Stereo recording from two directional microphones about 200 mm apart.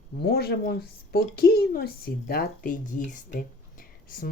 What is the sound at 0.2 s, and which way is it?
Speech, 55° left (ahead or behind).